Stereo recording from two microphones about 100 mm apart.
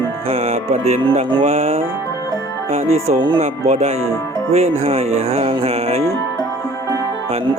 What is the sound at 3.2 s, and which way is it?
Speech, 50° right (ahead or behind).